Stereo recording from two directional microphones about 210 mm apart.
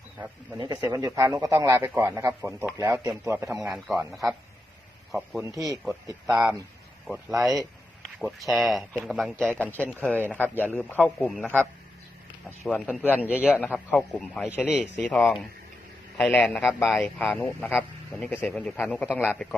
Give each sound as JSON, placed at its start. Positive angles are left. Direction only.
{"t": 0.6, "sound": "speech", "side_deg": -15}
{"t": 5.5, "sound": "speech", "side_deg": -15}
{"t": 6.2, "sound": "speech", "side_deg": 0}
{"t": 12.6, "sound": "speech", "side_deg": 5}
{"t": 19.0, "sound": "speech", "side_deg": -5}